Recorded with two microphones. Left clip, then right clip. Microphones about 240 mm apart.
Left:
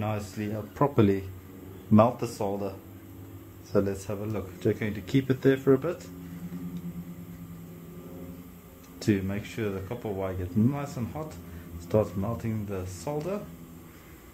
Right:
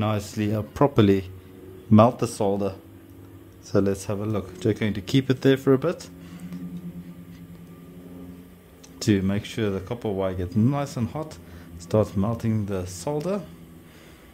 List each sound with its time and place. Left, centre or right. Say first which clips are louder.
0.0 s speech: right 6 dB; right
3.7 s speech: right 4 dB; right
9.0 s speech: right 5 dB; right